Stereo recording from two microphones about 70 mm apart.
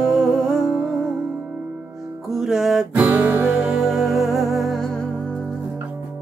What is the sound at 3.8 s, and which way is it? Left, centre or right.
Music, centre.